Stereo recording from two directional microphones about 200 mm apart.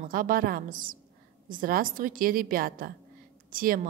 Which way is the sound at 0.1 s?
45° right (ahead or behind).